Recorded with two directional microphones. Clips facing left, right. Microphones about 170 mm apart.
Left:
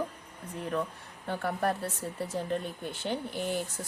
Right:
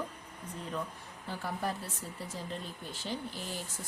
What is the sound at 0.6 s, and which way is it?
A woman's voice, 65° left (ahead or behind).